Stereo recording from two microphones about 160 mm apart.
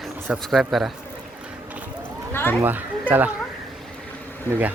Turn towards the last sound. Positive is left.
turn(degrees=-10)  # may be behind; listen again after turning